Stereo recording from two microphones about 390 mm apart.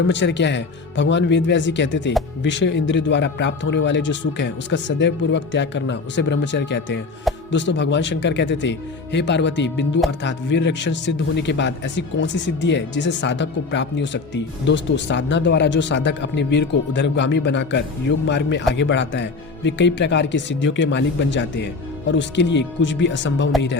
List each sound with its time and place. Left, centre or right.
0.1 s a man's voice: left